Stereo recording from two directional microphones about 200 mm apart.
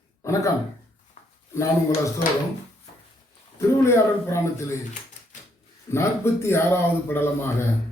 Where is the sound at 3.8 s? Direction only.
15° left (ahead or behind).